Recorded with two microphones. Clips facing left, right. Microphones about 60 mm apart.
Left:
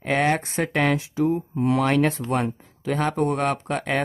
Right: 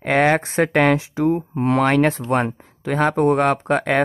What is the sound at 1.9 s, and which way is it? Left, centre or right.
Speech, right.